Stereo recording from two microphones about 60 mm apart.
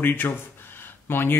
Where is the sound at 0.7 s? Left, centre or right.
Left.